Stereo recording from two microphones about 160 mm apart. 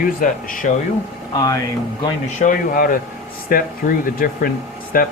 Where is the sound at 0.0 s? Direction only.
60° left (ahead or behind).